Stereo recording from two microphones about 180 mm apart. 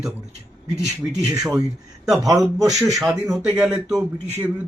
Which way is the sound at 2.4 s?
20° right (ahead or behind).